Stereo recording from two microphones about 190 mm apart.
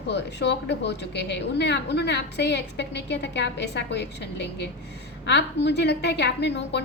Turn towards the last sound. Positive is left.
turn(degrees=65)  # may be behind; listen again after turning